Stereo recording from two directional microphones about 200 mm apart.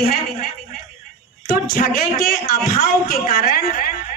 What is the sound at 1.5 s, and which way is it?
A woman's voice, 45° left (ahead or behind).